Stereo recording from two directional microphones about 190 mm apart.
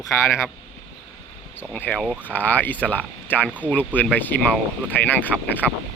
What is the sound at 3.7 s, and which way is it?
Speech, 10° left (ahead or behind).